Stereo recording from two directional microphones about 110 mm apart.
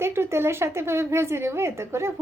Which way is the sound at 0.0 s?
25° right (ahead or behind).